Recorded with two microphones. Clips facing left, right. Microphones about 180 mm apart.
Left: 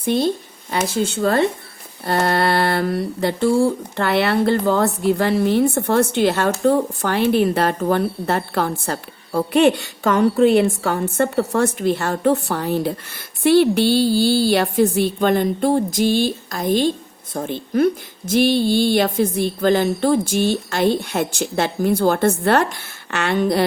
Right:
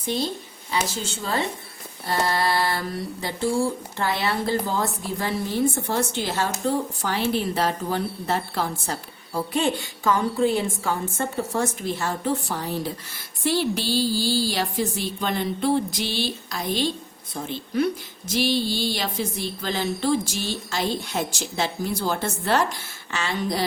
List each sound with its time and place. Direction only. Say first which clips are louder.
0.0 s a woman's voice: left 8 dB; 55° left (ahead or behind)